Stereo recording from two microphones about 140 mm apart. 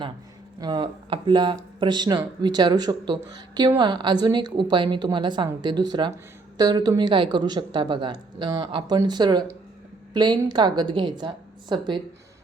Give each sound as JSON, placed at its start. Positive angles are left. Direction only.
{"t": 0.6, "sound": "speech", "side_deg": -35}